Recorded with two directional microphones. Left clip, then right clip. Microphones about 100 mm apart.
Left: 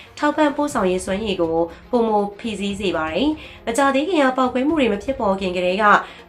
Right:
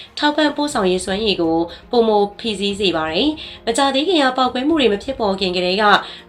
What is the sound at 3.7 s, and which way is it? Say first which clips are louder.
Speech: right 2 dB; 30° right (ahead or behind).